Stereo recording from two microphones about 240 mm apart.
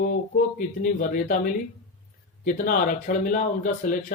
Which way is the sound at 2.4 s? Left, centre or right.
Left.